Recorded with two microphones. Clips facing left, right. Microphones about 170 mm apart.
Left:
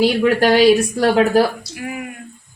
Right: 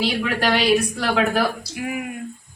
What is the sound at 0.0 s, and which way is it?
Speech, 45° left (ahead or behind).